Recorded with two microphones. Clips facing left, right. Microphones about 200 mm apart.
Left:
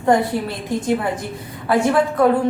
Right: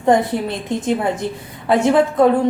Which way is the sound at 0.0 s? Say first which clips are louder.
Right 1 dB; 20° right (ahead or behind).